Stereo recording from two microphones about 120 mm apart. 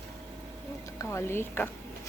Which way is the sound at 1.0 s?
20° left (ahead or behind).